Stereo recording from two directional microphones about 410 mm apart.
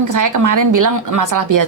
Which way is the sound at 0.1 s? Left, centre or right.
Right.